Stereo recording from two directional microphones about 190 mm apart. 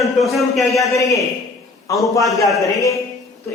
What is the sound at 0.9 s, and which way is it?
A man's voice, 15° left (ahead or behind).